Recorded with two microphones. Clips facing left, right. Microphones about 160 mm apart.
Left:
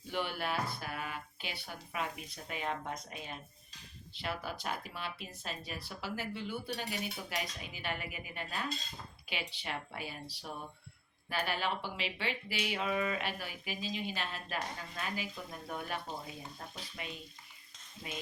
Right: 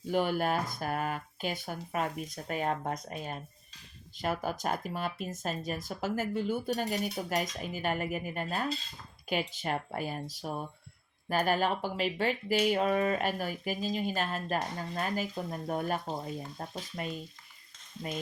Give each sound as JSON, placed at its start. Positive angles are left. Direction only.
{"t": 0.1, "sound": "speech", "side_deg": -45}